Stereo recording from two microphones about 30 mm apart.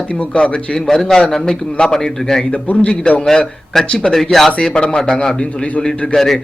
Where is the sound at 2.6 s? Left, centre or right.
Left.